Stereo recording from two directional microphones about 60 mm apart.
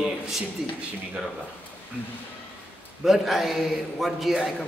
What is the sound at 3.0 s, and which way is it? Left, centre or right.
A man's voice, centre.